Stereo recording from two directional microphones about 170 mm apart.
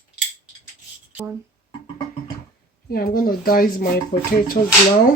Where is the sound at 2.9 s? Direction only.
60° left (ahead or behind).